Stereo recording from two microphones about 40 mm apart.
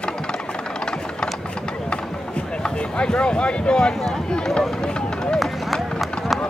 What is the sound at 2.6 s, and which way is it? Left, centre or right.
Speech, left.